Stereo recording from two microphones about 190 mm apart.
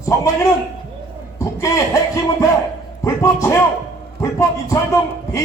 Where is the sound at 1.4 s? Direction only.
15° left (ahead or behind).